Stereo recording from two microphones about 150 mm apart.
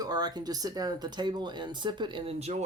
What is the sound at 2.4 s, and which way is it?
Speech, 50° right (ahead or behind).